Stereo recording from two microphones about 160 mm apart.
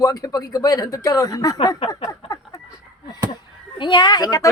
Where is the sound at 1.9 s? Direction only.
25° left (ahead or behind).